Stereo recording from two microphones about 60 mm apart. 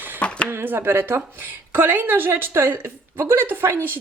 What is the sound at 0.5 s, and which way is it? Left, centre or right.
A woman's voice, right.